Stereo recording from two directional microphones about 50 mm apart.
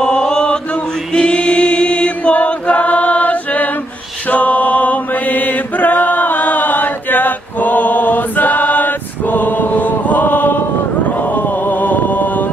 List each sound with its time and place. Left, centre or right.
0.0 s chant: centre; by 10.6 s left
11.3 s music: left